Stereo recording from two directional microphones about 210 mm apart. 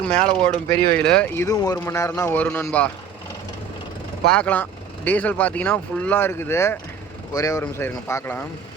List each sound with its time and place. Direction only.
0.0 s speech: 5° left (ahead or behind)
1.5 s speech: 15° left (ahead or behind)
4.3 s speech: 5° left (ahead or behind)